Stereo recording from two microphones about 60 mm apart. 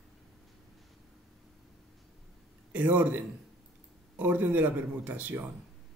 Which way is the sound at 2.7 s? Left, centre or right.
Right.